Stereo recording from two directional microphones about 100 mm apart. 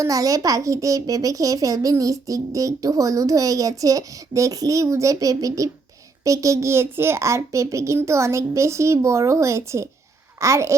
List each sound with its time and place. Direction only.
0.0 s a child's voice: 35° right (ahead or behind)